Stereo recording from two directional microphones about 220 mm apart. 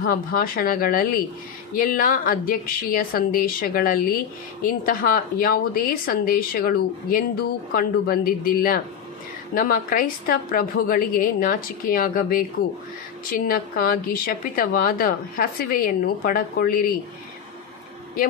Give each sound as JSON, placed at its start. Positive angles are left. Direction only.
{"t": 0.0, "sound": "a woman's voice", "side_deg": 40}